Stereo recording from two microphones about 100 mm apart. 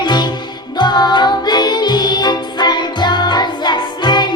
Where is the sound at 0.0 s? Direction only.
50° left (ahead or behind).